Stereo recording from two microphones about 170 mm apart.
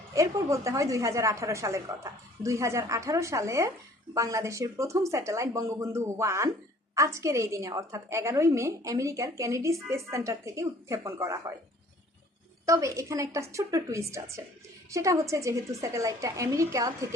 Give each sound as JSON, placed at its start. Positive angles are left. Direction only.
{"t": 0.1, "sound": "a woman's voice", "side_deg": -20}
{"t": 12.6, "sound": "a woman's voice", "side_deg": -20}